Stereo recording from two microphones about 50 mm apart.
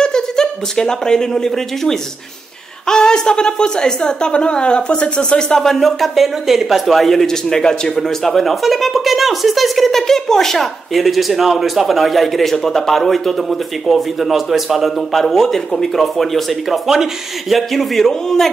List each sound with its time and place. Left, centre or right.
0.0 s a woman's voice: centre
5.5 s speech: centre